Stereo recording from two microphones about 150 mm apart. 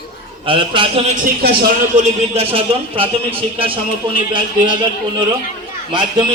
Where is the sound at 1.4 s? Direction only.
90° right.